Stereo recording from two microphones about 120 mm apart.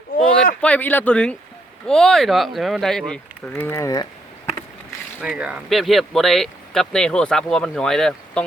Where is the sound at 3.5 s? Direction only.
20° left (ahead or behind).